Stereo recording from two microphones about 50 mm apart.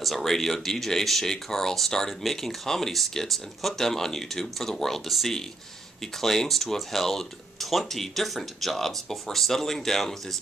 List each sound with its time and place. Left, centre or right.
0.0 s speech: centre